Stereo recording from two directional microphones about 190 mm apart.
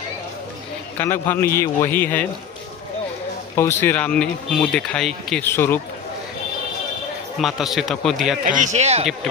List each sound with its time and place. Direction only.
0.9 s speech: 10° left (ahead or behind)
3.5 s speech: 10° left (ahead or behind)
7.3 s a man's voice: centre (ahead or behind)
8.4 s speech: 40° right (ahead or behind)